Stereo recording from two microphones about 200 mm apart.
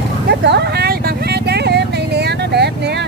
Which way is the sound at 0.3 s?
55° right (ahead or behind).